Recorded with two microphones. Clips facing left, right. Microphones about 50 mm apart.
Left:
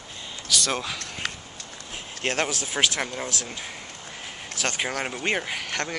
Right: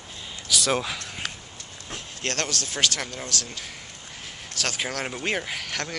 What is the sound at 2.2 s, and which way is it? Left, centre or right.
Speech, centre.